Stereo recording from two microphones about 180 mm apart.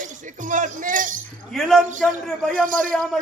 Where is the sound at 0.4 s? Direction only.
45° right (ahead or behind).